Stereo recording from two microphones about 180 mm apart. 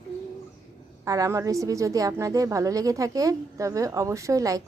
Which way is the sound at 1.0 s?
20° right (ahead or behind).